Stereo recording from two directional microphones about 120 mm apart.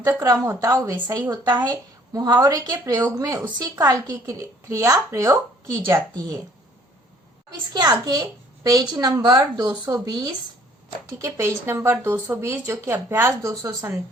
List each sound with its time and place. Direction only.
0.0 s speech: 25° right (ahead or behind)
2.1 s a child's voice: 30° right (ahead or behind)
7.7 s a child's voice: 35° right (ahead or behind)
11.2 s speech: 20° right (ahead or behind)